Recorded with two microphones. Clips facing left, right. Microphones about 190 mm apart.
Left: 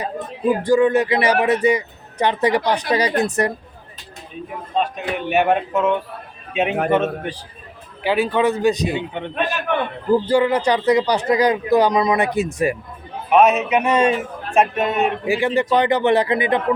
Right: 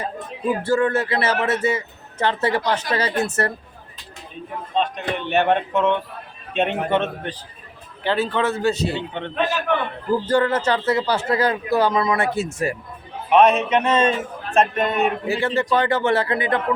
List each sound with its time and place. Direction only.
0.6 s speech: 15° left (ahead or behind)
4.7 s a man's voice: 5° left (ahead or behind)
13.3 s speech: 5° left (ahead or behind)
15.3 s speech: 15° left (ahead or behind)